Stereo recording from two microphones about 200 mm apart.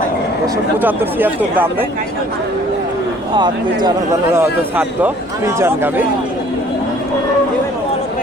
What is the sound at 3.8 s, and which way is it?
Speech, 15° right (ahead or behind).